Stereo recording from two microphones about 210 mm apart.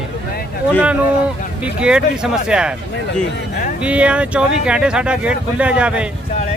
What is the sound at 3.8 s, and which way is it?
Speech, 5° right (ahead or behind).